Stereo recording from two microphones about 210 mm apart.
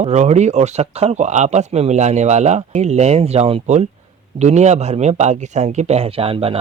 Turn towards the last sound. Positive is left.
turn(degrees=-25)  # may be behind; listen again after turning